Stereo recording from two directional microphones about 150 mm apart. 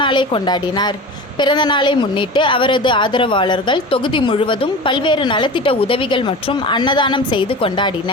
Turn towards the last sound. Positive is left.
turn(degrees=35)  # may be behind; listen again after turning